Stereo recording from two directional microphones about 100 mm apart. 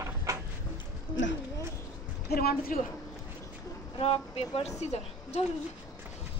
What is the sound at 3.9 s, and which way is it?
Speech, 80° left.